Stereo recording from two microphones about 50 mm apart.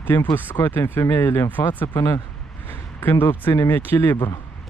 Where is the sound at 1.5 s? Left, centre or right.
Left.